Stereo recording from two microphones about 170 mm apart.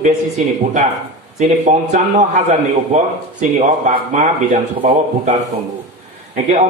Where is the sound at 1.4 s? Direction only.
40° right (ahead or behind).